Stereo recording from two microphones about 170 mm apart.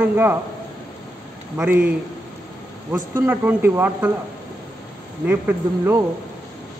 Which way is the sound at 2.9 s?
10° right (ahead or behind).